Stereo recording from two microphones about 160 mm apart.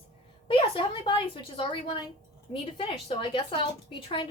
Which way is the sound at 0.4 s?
30° left (ahead or behind).